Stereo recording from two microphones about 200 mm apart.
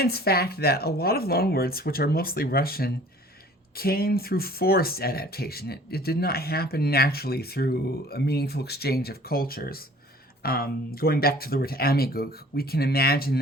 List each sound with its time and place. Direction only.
0.0 s speech: 50° left (ahead or behind)